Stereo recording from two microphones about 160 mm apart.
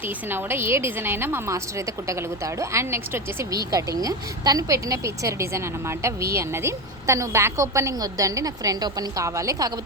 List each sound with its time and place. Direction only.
0.3 s a woman's voice: 15° right (ahead or behind)